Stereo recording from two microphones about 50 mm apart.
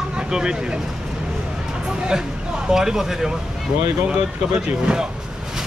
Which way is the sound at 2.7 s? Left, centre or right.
Centre.